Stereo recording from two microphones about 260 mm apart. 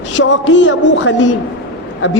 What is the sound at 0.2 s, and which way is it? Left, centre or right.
A woman's voice, left.